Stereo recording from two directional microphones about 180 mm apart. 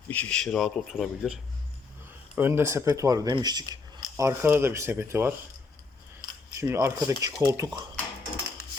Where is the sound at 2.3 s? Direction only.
15° right (ahead or behind).